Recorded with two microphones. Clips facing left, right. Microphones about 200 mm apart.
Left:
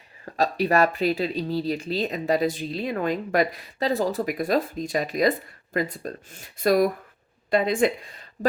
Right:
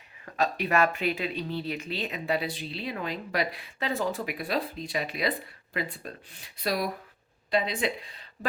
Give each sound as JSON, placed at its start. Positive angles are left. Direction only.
{"t": 0.3, "sound": "speech", "side_deg": 35}